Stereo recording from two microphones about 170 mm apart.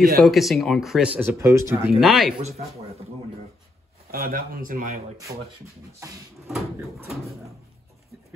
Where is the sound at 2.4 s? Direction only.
40° right (ahead or behind).